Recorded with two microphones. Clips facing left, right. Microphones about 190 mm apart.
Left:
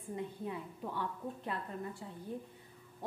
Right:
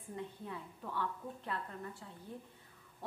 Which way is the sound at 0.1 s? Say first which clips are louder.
Left 4 dB; 15° left (ahead or behind).